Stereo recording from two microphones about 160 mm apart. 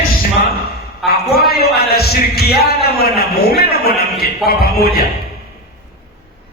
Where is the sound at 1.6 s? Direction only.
80° left.